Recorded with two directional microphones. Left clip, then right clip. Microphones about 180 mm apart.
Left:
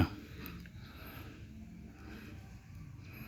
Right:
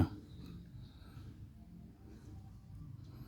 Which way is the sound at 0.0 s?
15° right (ahead or behind).